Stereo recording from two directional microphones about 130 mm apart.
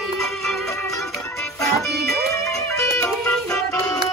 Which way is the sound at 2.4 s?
25° left (ahead or behind).